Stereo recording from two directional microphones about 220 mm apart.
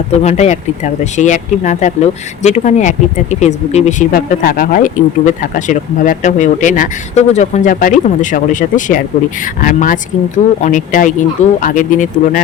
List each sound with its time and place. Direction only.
0.1 s speech: 30° left (ahead or behind)